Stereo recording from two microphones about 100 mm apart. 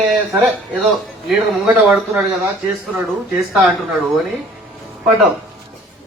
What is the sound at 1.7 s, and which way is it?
A man's voice, 15° right (ahead or behind).